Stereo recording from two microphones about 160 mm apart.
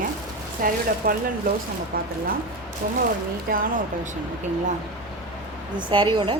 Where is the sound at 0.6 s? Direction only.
60° right (ahead or behind).